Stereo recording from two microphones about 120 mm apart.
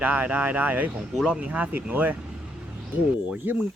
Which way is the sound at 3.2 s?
15° right (ahead or behind).